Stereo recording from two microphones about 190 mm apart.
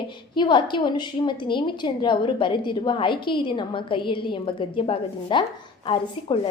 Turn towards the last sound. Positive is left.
turn(degrees=25)  # may be behind; listen again after turning